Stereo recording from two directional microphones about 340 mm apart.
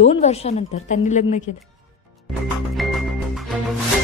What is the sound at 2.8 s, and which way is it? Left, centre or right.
Music, centre.